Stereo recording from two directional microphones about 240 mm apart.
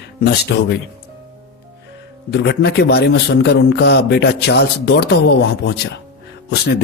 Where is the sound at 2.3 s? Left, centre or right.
Left.